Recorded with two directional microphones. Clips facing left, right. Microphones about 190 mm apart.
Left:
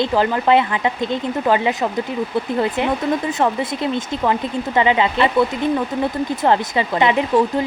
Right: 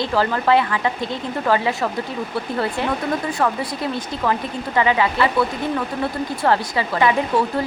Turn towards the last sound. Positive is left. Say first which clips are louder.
# left 3 dB
turn(degrees=20)  # may be behind; listen again after turning